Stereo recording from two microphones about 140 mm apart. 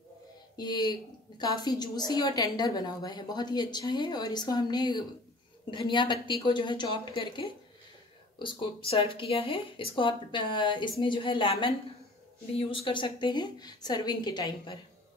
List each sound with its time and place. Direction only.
0.6 s a woman's voice: 30° left (ahead or behind)